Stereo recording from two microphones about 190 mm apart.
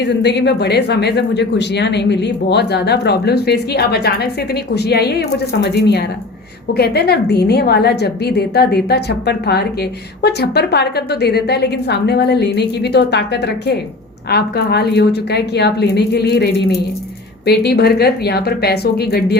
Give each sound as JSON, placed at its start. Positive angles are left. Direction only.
{"t": 0.2, "sound": "speech", "side_deg": 60}